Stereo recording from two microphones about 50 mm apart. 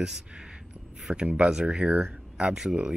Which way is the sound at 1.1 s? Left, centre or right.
Right.